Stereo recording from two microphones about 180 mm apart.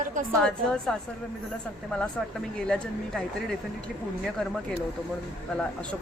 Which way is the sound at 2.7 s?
5° left (ahead or behind).